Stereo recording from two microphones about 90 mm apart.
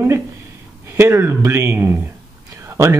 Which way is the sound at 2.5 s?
35° right (ahead or behind).